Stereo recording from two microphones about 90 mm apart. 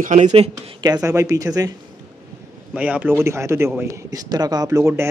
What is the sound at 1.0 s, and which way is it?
Speech, 35° right (ahead or behind).